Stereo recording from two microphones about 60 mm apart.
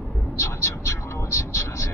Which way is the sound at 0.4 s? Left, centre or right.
Left.